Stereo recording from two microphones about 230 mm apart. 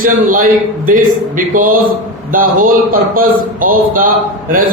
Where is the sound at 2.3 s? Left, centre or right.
Right.